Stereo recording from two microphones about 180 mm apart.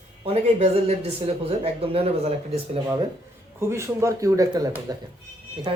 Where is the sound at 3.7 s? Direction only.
15° right (ahead or behind).